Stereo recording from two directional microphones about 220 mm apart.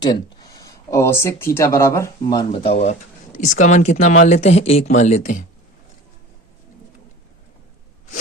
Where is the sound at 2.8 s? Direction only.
30° left (ahead or behind).